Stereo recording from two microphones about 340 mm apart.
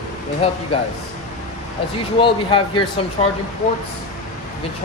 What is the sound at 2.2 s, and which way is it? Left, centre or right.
Speech, centre.